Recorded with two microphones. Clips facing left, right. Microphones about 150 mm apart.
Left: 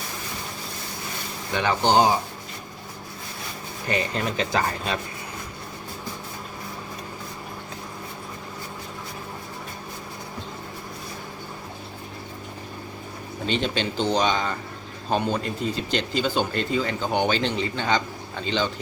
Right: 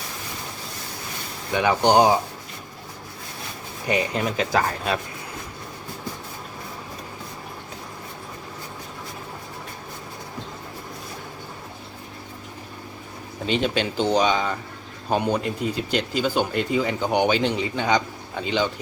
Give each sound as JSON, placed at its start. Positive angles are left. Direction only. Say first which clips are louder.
{"t": 1.5, "sound": "speech", "louder": "right 3 dB", "side_deg": -15}
{"t": 3.8, "sound": "speech", "louder": "right 3 dB", "side_deg": -10}
{"t": 13.5, "sound": "speech", "louder": "right 3 dB", "side_deg": -5}